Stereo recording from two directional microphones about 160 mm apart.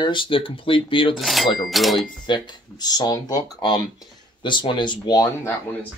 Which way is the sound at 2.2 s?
30° left (ahead or behind).